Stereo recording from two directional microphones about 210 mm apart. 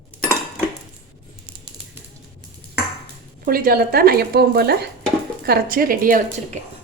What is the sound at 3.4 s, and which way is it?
Speech, 45° right (ahead or behind).